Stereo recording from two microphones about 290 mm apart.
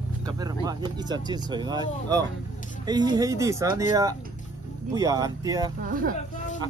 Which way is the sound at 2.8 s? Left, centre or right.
Centre.